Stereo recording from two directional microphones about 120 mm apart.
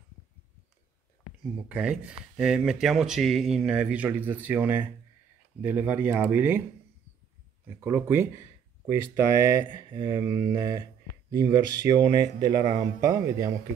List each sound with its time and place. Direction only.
1.7 s speech: 10° right (ahead or behind)
7.8 s speech: 20° right (ahead or behind)
9.7 s speech: 40° right (ahead or behind)